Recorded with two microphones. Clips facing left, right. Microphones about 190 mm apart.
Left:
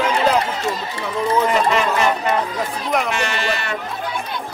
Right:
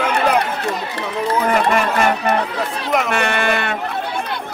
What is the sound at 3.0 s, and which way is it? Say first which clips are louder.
Speech: right 3 dB; 55° right (ahead or behind).